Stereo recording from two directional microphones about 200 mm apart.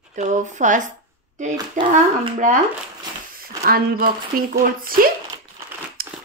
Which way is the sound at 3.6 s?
50° right (ahead or behind).